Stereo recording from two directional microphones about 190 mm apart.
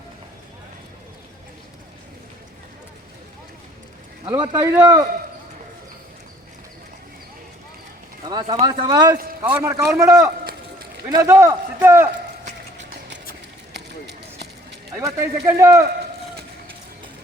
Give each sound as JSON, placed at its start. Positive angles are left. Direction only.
{"t": 4.3, "sound": "speech", "side_deg": -20}
{"t": 8.2, "sound": "speech", "side_deg": -25}
{"t": 9.4, "sound": "a man's voice", "side_deg": -10}
{"t": 12.7, "sound": "a sound", "side_deg": -70}
{"t": 13.7, "sound": "run", "side_deg": -60}
{"t": 14.9, "sound": "a man's voice", "side_deg": -15}